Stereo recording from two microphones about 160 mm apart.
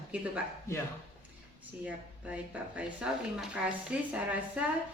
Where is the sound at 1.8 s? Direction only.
10° right (ahead or behind).